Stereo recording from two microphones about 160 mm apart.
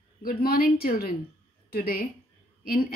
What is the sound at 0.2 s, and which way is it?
Speech, 70° left (ahead or behind).